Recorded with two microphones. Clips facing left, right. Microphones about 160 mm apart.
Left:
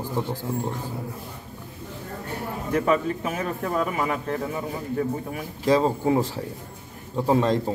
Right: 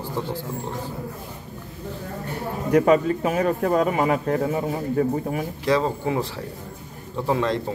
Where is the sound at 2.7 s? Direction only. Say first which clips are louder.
Right 5 dB; 40° right (ahead or behind).